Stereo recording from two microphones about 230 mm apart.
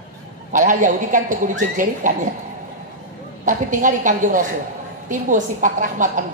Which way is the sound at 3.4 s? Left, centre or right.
Right.